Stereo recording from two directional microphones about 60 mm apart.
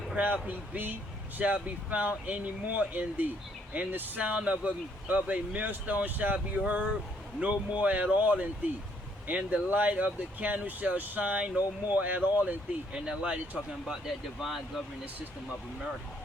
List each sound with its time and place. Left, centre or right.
0.4 s speech: right
14.4 s speech: centre